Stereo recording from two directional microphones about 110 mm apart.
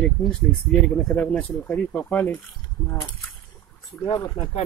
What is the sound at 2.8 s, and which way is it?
Speech, 30° left (ahead or behind).